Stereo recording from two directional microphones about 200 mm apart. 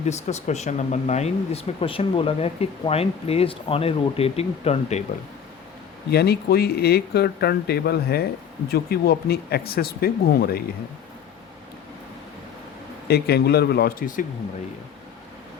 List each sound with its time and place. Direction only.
0.0 s speech: 35° left (ahead or behind)
6.1 s speech: 55° left (ahead or behind)
13.1 s speech: 50° left (ahead or behind)